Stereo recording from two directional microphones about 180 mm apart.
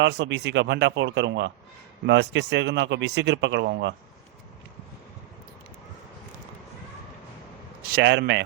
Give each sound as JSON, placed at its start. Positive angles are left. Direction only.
{"t": 0.0, "sound": "a man's voice", "side_deg": -75}
{"t": 7.8, "sound": "a man's voice", "side_deg": -60}